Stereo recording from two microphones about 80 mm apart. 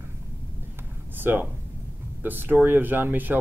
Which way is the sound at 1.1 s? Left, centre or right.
Right.